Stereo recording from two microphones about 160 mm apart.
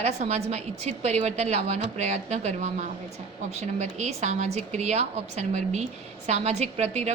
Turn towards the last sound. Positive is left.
turn(degrees=-40)  # may be behind; listen again after turning